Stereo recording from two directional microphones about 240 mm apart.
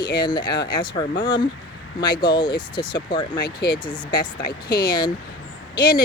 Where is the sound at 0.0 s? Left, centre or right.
Centre.